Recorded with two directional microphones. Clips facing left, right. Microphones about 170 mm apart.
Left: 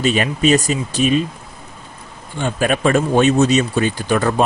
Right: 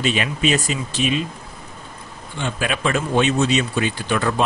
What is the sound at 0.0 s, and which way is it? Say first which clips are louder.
Speech: left 4 dB; 40° left (ahead or behind).